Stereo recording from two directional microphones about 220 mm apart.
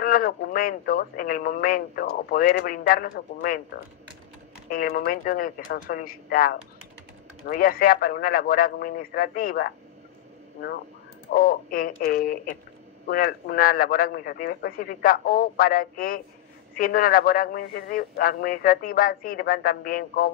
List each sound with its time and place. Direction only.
0.0 s speech: 40° left (ahead or behind)
4.6 s speech: 40° left (ahead or behind)
11.3 s speech: 40° left (ahead or behind)